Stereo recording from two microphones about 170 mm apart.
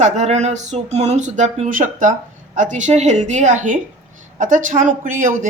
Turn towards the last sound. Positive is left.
turn(degrees=-50)  # may be behind; listen again after turning